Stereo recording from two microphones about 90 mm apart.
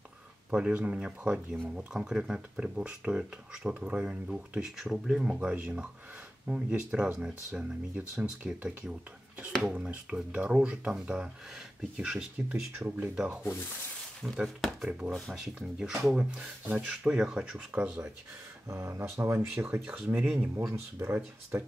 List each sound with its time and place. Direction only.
0.5 s speech: 10° right (ahead or behind)
6.9 s speech: 10° right (ahead or behind)
12.7 s speech: 20° right (ahead or behind)
13.1 s speech: 10° right (ahead or behind)
18.7 s speech: 30° right (ahead or behind)
20.1 s speech: 10° right (ahead or behind)
20.5 s speech: 30° right (ahead or behind)